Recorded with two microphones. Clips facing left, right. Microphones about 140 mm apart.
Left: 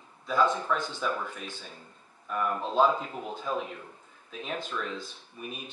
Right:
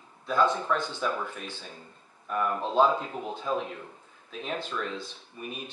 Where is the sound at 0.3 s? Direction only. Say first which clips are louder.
Right 1 dB; centre (ahead or behind).